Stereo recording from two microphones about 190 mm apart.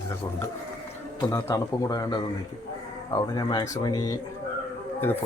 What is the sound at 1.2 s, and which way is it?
A man's voice, 15° left (ahead or behind).